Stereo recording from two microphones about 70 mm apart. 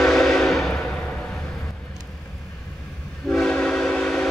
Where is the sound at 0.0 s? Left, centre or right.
Centre.